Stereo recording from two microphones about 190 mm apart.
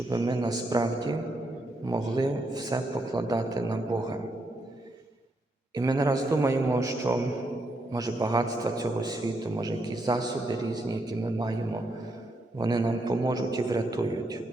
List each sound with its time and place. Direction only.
0.1 s a man's voice: 20° right (ahead or behind)
5.7 s a man's voice: 20° right (ahead or behind)
12.5 s a man's voice: 20° right (ahead or behind)